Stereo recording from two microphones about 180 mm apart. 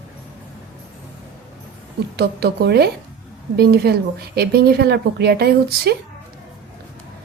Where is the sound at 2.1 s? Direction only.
65° right (ahead or behind).